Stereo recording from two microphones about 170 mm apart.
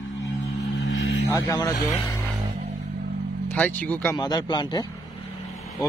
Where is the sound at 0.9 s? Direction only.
90° left.